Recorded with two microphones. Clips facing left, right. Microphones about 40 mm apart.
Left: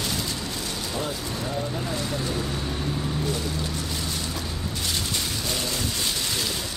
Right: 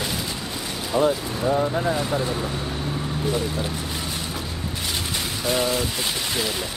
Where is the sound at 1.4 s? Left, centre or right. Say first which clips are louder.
Right 10 dB; right.